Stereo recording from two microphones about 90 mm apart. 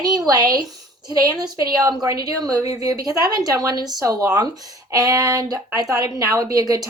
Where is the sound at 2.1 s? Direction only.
40° right (ahead or behind).